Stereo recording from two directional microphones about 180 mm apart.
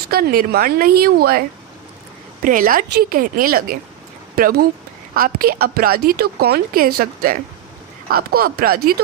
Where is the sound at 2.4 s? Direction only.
50° right (ahead or behind).